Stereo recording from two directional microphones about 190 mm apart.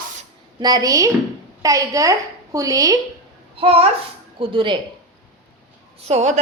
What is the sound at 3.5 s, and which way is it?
A child's voice, 30° right (ahead or behind).